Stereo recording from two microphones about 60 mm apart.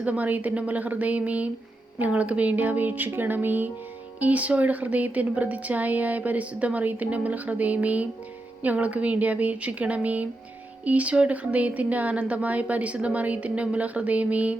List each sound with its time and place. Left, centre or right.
0.0 s speech: right
3.1 s music: right
4.2 s speech: right